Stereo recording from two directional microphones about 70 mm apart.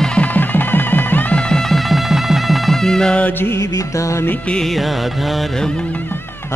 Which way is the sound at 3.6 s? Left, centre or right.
Left.